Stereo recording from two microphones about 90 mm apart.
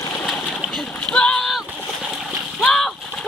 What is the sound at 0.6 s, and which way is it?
Rowboat, 5° left (ahead or behind).